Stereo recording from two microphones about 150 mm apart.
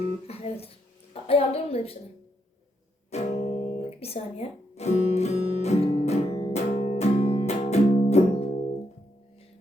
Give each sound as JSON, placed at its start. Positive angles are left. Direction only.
{"t": 0.3, "sound": "a woman's voice", "side_deg": 40}
{"t": 3.1, "sound": "music", "side_deg": 45}
{"t": 6.7, "sound": "music", "side_deg": 70}
{"t": 7.0, "sound": "music", "side_deg": 50}